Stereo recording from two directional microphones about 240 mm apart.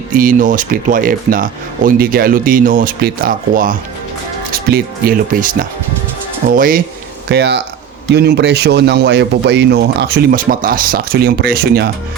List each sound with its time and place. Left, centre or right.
0.1 s speech: right